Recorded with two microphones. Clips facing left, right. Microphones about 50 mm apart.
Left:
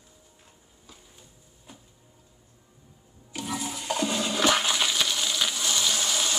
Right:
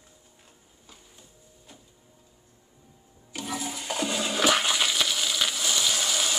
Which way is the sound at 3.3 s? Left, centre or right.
Centre.